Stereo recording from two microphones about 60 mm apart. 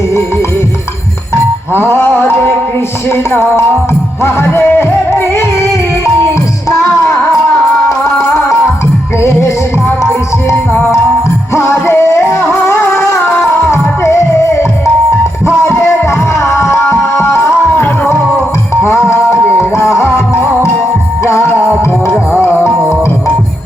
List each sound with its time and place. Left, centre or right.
1.7 s music: left
6.7 s music: left
11.5 s music: left
18.9 s music: left
22.8 s music: right